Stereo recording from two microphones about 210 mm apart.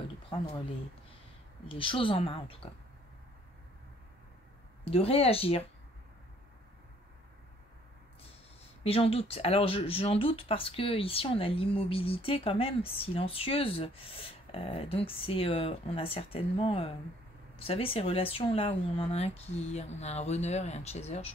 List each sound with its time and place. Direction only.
1.7 s speech: 25° left (ahead or behind)
4.8 s speech: 30° left (ahead or behind)
8.8 s speech: 25° left (ahead or behind)